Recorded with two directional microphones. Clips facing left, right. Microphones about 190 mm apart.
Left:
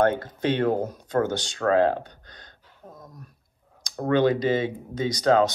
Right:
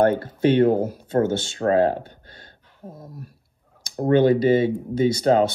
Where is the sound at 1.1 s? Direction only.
25° right (ahead or behind).